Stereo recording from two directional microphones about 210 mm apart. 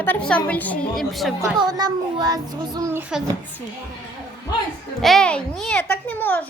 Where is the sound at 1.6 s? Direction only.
20° right (ahead or behind).